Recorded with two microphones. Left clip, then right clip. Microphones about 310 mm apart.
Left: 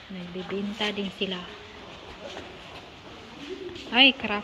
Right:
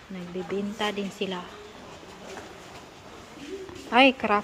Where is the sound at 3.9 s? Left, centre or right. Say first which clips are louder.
Right 1 dB; centre.